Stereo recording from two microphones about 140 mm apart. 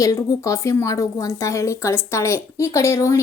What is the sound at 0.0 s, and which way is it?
A woman's voice, 25° left (ahead or behind).